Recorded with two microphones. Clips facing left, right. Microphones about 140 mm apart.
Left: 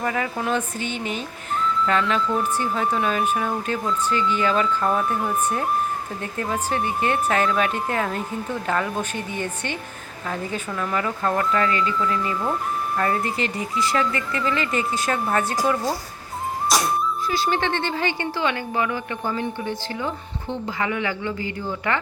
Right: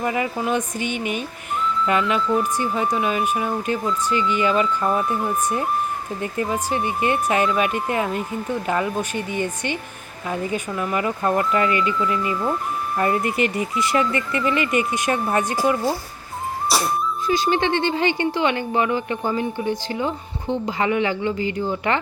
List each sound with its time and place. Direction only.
0.0 s speech: 5° right (ahead or behind)
13.0 s speech: 20° right (ahead or behind)
17.2 s speech: 20° right (ahead or behind)